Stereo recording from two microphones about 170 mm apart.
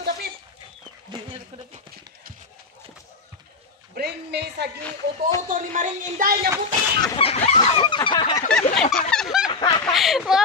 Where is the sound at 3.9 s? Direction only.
75° right (ahead or behind).